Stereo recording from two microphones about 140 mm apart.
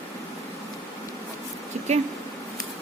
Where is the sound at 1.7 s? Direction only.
50° right (ahead or behind).